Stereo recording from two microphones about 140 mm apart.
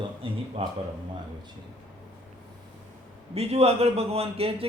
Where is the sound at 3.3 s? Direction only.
50° right (ahead or behind).